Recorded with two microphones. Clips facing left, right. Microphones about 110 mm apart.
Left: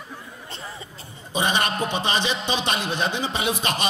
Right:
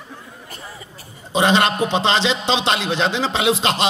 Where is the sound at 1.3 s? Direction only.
75° right (ahead or behind).